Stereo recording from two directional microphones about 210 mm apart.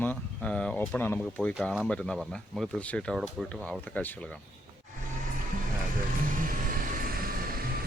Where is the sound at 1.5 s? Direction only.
Centre (ahead or behind).